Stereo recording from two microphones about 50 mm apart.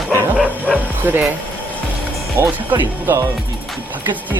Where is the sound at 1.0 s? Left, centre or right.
Right.